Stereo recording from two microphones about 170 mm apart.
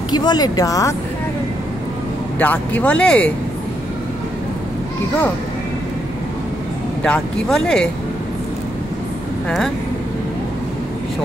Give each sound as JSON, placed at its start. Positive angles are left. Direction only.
{"t": 0.1, "sound": "speech", "side_deg": 25}
{"t": 2.3, "sound": "speech", "side_deg": 10}
{"t": 7.0, "sound": "speech", "side_deg": 5}